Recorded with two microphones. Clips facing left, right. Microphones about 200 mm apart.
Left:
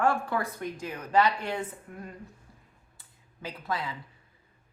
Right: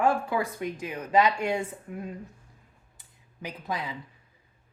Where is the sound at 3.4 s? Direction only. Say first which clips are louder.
Even; 15° right (ahead or behind).